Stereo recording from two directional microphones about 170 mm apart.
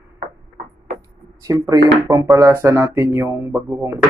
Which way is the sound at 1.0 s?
20° right (ahead or behind).